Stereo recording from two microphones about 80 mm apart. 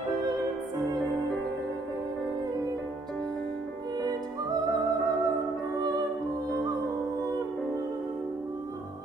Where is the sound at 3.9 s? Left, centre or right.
Right.